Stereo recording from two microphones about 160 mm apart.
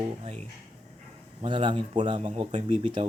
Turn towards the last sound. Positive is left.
turn(degrees=-35)  # may be behind; listen again after turning